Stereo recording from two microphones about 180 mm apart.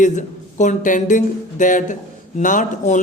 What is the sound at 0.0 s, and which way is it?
Speech, 45° left (ahead or behind).